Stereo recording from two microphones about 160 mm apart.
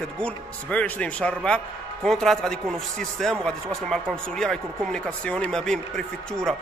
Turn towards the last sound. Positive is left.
turn(degrees=5)  # may be behind; listen again after turning